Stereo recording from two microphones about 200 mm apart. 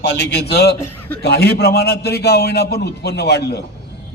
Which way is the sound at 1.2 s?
55° left (ahead or behind).